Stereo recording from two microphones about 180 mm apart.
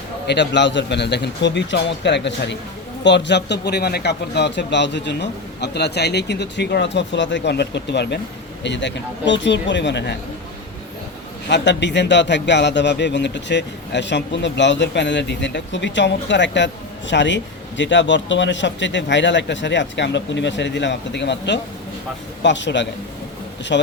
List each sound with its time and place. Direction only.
0.3 s a man's voice: 75° left (ahead or behind)
11.4 s a man's voice: 75° left (ahead or behind)
23.7 s a man's voice: 70° left (ahead or behind)